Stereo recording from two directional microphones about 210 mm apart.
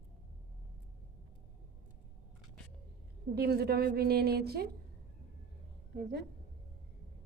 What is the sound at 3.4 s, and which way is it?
A woman's voice, 50° right (ahead or behind).